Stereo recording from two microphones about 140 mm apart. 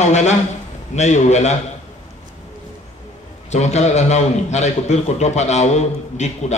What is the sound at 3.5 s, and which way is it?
A man's voice, 55° left (ahead or behind).